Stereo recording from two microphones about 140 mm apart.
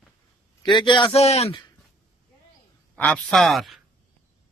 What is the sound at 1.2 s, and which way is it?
Speech, 50° left (ahead or behind).